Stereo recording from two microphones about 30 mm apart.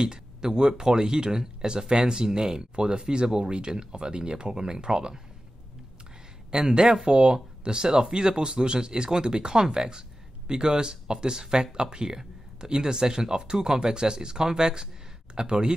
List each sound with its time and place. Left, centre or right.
0.0 s speech: right
6.5 s speech: right